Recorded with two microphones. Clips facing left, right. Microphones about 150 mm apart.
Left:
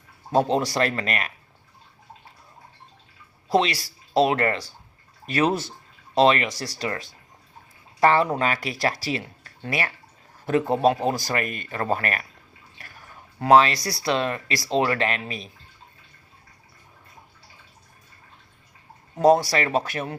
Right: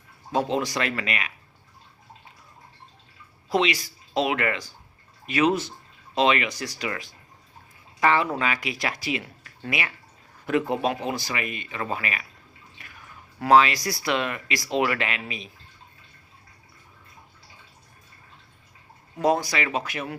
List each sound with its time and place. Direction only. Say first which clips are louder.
0.3 s speech: left 4 dB; 40° left (ahead or behind)
3.5 s speech: left 2 dB; 35° left (ahead or behind)
8.0 s speech: left 3 dB; 35° left (ahead or behind)
19.2 s speech: left 5 dB; 35° left (ahead or behind)